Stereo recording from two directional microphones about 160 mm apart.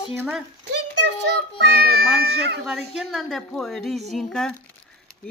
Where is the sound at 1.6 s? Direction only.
75° right (ahead or behind).